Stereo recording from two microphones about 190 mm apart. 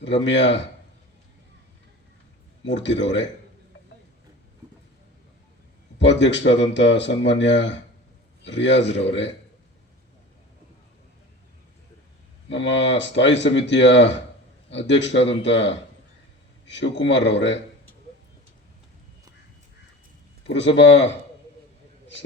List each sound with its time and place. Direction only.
0.0 s speech: 70° left (ahead or behind)
2.6 s speech: 70° left (ahead or behind)
6.0 s speech: 70° left (ahead or behind)
12.5 s speech: 70° left (ahead or behind)
20.5 s speech: 70° left (ahead or behind)